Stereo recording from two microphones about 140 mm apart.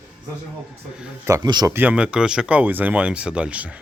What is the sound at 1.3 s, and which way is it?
Speech, 25° right (ahead or behind).